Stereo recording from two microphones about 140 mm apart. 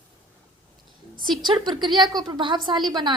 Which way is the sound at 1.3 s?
35° right (ahead or behind).